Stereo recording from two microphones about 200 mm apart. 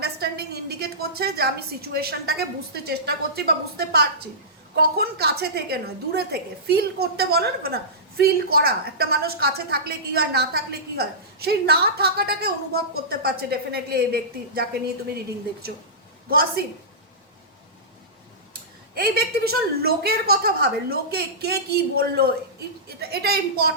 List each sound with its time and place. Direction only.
0.0 s a woman's voice: 55° right (ahead or behind)
16.3 s a woman's voice: 50° right (ahead or behind)
18.9 s a woman's voice: 50° right (ahead or behind)